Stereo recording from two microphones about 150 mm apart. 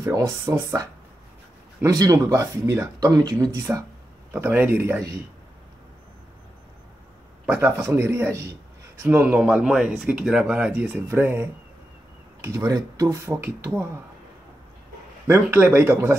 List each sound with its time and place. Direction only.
0.0 s speech: 20° right (ahead or behind)
4.3 s speech: 10° right (ahead or behind)
7.4 s speech: 15° right (ahead or behind)
15.2 s speech: 15° right (ahead or behind)